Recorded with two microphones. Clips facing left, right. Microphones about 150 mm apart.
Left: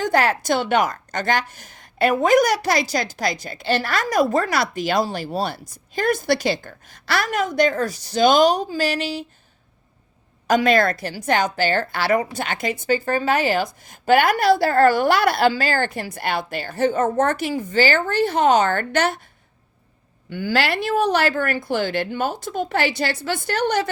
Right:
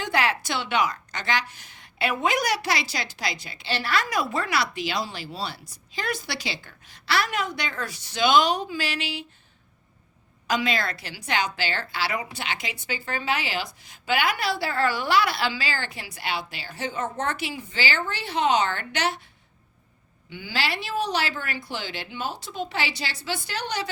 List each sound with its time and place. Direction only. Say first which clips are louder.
0.0 s a woman's voice: left 6 dB; 45° left (ahead or behind)
10.4 s a woman's voice: left 9 dB; 50° left (ahead or behind)
20.3 s a woman's voice: left 8 dB; 55° left (ahead or behind)